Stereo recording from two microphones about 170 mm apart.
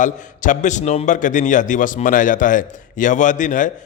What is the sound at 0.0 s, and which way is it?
A man's voice, 50° left (ahead or behind).